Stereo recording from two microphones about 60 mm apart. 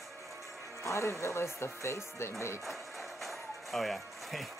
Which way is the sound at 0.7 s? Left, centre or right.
Left.